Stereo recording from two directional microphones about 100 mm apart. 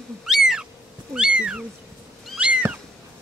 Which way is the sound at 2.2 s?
10° right (ahead or behind).